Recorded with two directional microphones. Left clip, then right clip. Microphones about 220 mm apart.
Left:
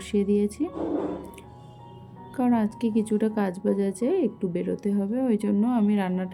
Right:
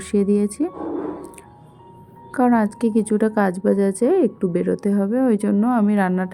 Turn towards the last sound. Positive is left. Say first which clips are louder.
# right 7 dB
turn(degrees=-20)  # may be behind; listen again after turning